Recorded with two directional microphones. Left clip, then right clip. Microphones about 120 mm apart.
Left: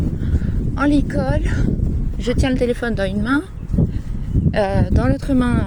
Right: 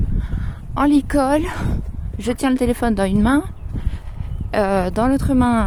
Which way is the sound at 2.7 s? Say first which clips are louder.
Right 2 dB; 55° right (ahead or behind).